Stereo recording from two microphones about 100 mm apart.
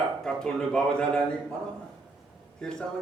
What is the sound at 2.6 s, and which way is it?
Speech, 5° left (ahead or behind).